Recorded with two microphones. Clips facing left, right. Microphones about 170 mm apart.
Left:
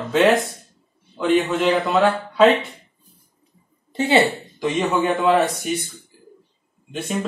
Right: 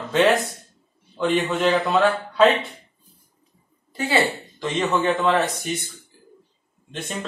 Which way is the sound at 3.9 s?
20° left (ahead or behind).